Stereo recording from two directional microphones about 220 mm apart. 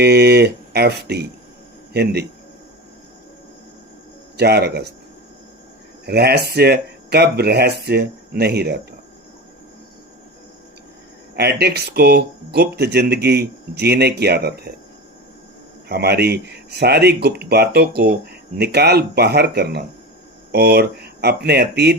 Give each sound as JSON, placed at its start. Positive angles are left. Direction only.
{"t": 0.0, "sound": "speech", "side_deg": -50}
{"t": 4.4, "sound": "speech", "side_deg": -45}
{"t": 6.1, "sound": "speech", "side_deg": -45}
{"t": 11.3, "sound": "speech", "side_deg": -45}
{"t": 15.9, "sound": "speech", "side_deg": -45}